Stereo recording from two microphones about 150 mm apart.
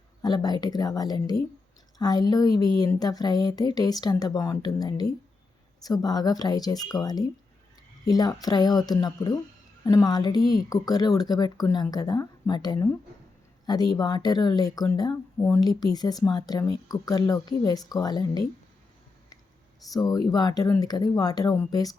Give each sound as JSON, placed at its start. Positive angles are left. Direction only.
{"t": 0.2, "sound": "a woman's voice", "side_deg": 25}
{"t": 10.4, "sound": "speech", "side_deg": 85}
{"t": 10.7, "sound": "a woman's voice", "side_deg": 25}
{"t": 19.9, "sound": "a woman's voice", "side_deg": 25}